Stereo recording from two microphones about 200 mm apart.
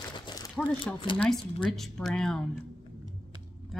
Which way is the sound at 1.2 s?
5° left (ahead or behind).